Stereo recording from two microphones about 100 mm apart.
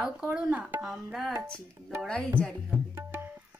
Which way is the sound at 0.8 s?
Centre (ahead or behind).